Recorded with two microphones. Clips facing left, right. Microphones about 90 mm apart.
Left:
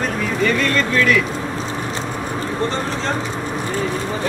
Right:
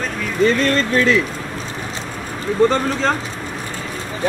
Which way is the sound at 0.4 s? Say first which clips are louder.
Right 4 dB; 30° right (ahead or behind).